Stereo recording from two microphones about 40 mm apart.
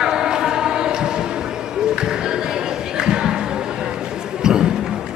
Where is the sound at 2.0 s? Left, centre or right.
Centre.